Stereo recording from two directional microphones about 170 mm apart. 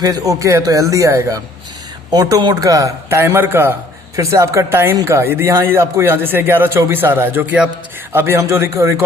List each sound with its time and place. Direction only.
0.0 s speech: 20° right (ahead or behind)